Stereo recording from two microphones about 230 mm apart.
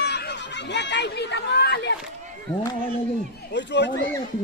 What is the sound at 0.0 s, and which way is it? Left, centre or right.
Speech, left.